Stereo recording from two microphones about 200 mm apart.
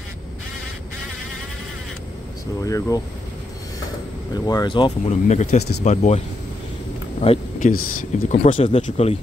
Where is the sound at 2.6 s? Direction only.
15° left (ahead or behind).